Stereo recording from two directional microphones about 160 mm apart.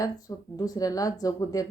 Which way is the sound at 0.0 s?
20° left (ahead or behind).